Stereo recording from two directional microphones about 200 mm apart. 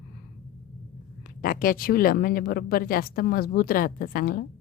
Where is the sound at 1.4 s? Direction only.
45° left (ahead or behind).